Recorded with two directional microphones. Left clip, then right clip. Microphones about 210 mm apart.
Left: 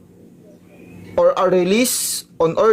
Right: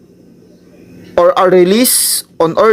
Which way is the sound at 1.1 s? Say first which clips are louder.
Right 7 dB; 30° right (ahead or behind).